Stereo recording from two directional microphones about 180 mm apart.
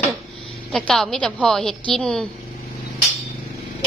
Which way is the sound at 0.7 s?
5° left (ahead or behind).